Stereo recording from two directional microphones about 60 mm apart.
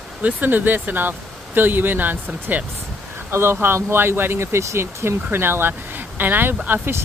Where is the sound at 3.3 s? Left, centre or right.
Right.